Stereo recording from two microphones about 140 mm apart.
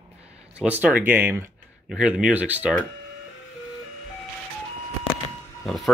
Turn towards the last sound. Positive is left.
turn(degrees=0)  # may be behind; listen again after turning